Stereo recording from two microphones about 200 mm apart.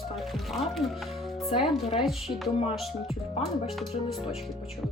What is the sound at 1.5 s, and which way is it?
Speech, 25° left (ahead or behind).